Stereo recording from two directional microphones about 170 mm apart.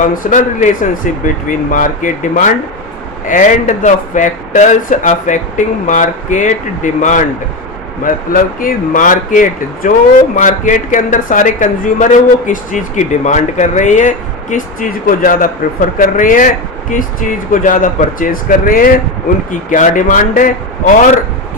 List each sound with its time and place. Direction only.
0.1 s speech: 50° left (ahead or behind)